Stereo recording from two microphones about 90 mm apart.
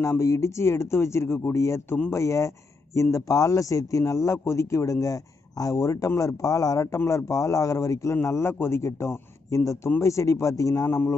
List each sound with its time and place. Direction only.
0.0 s speech: 35° left (ahead or behind)